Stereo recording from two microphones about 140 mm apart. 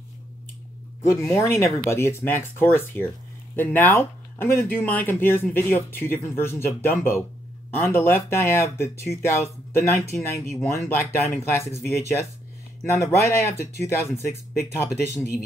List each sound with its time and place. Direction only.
1.0 s speech: 20° left (ahead or behind)